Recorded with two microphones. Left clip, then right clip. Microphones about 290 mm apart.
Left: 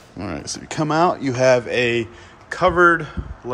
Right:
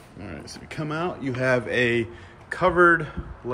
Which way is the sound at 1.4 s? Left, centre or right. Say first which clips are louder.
Left 6 dB; centre.